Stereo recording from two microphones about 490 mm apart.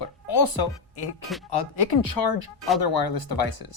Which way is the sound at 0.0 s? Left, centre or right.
Left.